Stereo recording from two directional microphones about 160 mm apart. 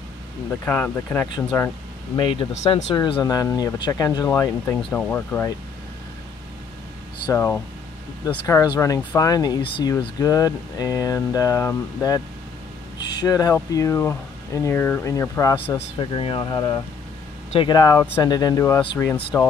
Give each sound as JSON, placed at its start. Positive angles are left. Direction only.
{"t": 0.7, "sound": "speech", "side_deg": 10}
{"t": 2.1, "sound": "speech", "side_deg": 35}
{"t": 7.3, "sound": "speech", "side_deg": 15}
{"t": 16.0, "sound": "speech", "side_deg": 35}